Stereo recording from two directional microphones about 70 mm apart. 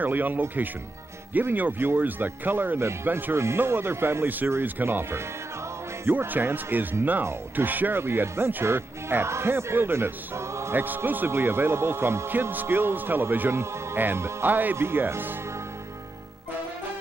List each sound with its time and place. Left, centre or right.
0.0 s a man's voice: right
2.8 s a man's voice: right
10.8 s a man's voice: right